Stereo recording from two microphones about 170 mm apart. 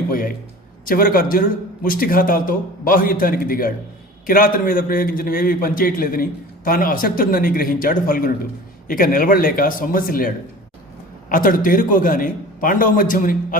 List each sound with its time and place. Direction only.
0.1 s a man's voice: 55° left (ahead or behind)